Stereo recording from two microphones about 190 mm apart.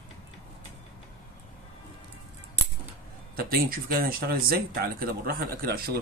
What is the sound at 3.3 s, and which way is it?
Speech, 50° right (ahead or behind).